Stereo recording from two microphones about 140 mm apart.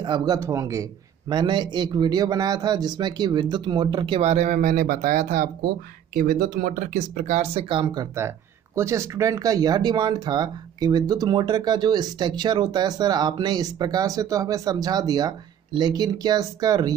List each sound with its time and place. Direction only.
0.0 s speech: 30° right (ahead or behind)
1.3 s a man's voice: 30° right (ahead or behind); by 4.6 s 50° right (ahead or behind)
4.6 s speech: 90° right; by 5.5 s 75° right (ahead or behind)
6.1 s speech: 85° right; by 7.6 s 60° right (ahead or behind)
7.7 s speech: 30° right (ahead or behind)